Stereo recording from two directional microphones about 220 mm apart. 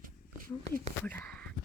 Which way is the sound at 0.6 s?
30° right (ahead or behind).